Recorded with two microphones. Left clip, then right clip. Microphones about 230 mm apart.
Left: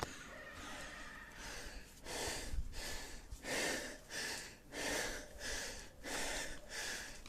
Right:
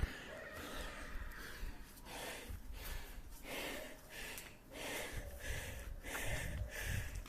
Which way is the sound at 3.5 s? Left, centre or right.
Left.